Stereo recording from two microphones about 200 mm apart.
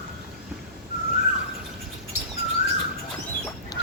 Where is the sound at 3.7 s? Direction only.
20° left (ahead or behind).